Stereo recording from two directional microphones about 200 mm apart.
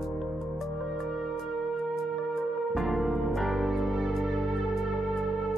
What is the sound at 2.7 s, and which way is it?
Music, centre (ahead or behind).